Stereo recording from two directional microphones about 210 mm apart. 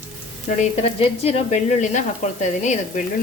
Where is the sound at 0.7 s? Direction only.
30° left (ahead or behind).